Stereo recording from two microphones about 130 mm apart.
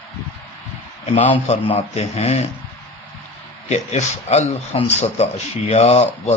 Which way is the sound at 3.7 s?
60° left (ahead or behind).